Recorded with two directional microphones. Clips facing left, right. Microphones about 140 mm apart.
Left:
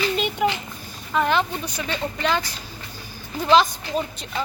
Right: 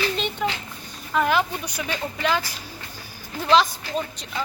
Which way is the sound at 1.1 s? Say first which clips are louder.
Even; 5° right (ahead or behind).